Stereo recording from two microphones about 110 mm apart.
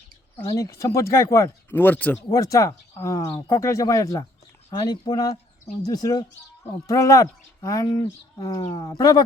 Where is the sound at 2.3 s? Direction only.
30° left (ahead or behind).